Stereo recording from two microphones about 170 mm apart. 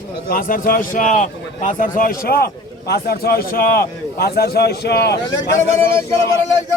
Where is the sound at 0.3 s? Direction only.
55° left (ahead or behind); by 5.2 s 75° left (ahead or behind).